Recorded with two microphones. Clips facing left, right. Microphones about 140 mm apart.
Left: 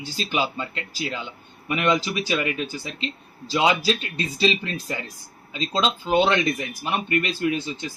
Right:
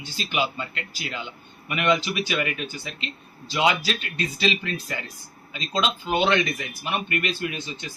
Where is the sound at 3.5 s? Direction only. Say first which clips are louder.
Left 2 dB; 30° left (ahead or behind).